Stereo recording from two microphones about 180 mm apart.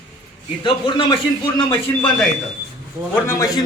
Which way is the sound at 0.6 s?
30° left (ahead or behind).